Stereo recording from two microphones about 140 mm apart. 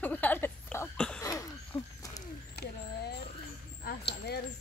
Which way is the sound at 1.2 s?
25° left (ahead or behind).